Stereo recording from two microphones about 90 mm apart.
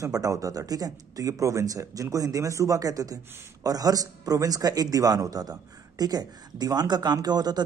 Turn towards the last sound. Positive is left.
turn(degrees=-50)  # may be behind; listen again after turning